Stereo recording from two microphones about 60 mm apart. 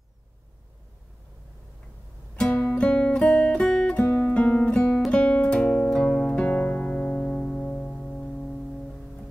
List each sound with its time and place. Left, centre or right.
2.5 s music: left
4.0 s guitar: left
5.1 s music: centre